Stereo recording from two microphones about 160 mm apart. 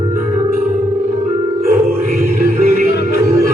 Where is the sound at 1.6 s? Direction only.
65° right (ahead or behind).